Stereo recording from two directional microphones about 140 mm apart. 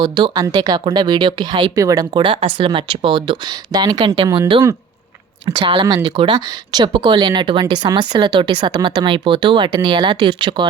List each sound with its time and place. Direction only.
0.0 s speech: 30° right (ahead or behind)
5.8 s speech: 30° right (ahead or behind)